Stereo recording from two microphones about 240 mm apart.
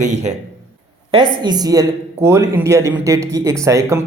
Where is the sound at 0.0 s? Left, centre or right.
Right.